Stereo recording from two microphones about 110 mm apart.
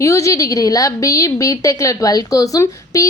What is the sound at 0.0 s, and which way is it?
A woman's voice, 30° left (ahead or behind).